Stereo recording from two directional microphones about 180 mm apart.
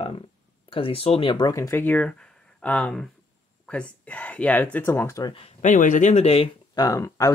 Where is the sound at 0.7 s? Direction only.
30° left (ahead or behind).